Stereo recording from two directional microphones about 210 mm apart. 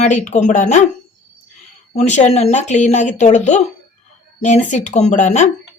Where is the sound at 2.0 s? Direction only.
35° left (ahead or behind).